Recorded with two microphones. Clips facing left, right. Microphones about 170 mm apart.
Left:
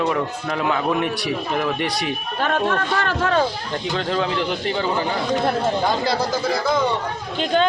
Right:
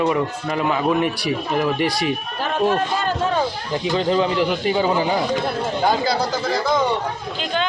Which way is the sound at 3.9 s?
5° right (ahead or behind).